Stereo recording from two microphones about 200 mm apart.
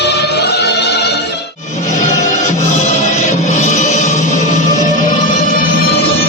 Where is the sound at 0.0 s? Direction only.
55° left (ahead or behind).